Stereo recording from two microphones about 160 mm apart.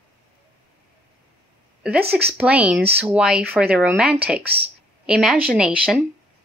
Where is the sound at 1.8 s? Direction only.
10° right (ahead or behind).